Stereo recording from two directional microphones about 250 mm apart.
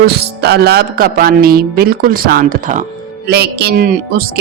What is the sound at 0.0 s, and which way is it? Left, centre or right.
Speech, right.